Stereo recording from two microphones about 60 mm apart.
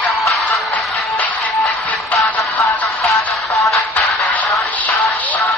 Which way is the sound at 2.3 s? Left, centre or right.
Left.